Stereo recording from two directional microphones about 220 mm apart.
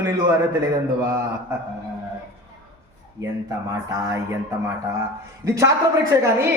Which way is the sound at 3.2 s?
15° right (ahead or behind).